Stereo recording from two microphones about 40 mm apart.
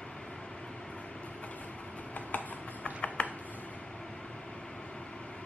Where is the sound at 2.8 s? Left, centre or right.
Left.